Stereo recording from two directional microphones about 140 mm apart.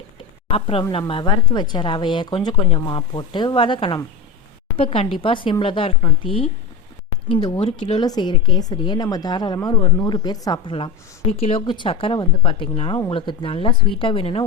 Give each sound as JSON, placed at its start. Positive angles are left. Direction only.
{"t": 0.4, "sound": "speech", "side_deg": 40}
{"t": 11.6, "sound": "speech", "side_deg": 35}